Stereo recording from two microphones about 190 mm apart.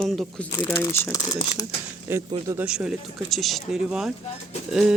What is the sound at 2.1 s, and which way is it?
Speech, 10° right (ahead or behind).